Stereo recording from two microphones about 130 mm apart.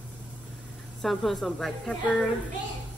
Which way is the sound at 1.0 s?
Centre (ahead or behind).